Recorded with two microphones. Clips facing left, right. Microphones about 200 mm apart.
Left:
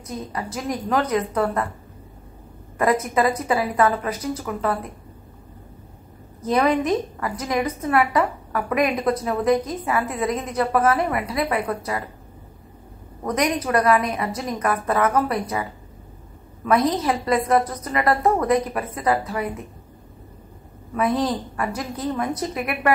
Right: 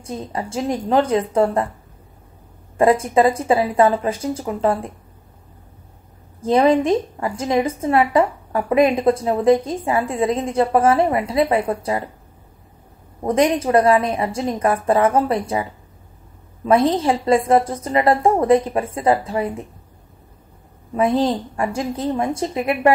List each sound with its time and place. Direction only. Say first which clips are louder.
0.0 s a woman's voice: right 3 dB; 25° right (ahead or behind)
2.8 s a woman's voice: right 5 dB; 30° right (ahead or behind)
6.4 s a woman's voice: right 5 dB; 25° right (ahead or behind)
13.2 s a woman's voice: right 5 dB; 30° right (ahead or behind)
16.6 s a woman's voice: right 4 dB; 25° right (ahead or behind)
20.9 s a woman's voice: right 4 dB; 25° right (ahead or behind)